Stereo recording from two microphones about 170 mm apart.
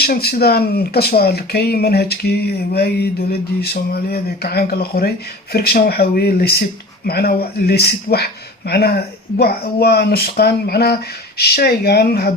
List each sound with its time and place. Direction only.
0.0 s speech: 65° left (ahead or behind)